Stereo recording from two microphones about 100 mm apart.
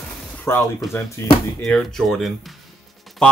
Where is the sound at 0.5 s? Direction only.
25° left (ahead or behind).